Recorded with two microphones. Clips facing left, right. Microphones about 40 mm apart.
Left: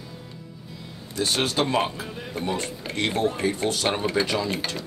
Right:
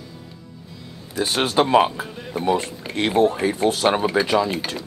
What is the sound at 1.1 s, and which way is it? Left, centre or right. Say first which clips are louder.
Speech: right 5 dB; centre.